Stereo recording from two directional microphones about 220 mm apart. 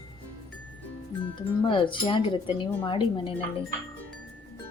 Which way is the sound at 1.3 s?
20° left (ahead or behind).